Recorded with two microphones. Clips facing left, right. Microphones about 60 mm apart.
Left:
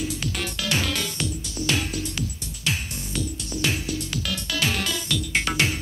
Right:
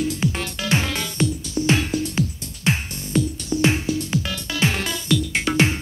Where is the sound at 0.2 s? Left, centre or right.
Right.